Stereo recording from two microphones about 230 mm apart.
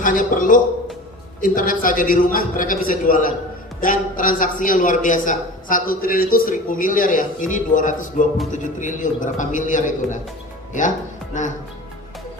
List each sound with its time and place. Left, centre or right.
0.0 s a man's voice: left